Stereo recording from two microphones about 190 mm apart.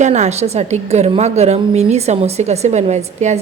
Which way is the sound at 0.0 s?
35° right (ahead or behind).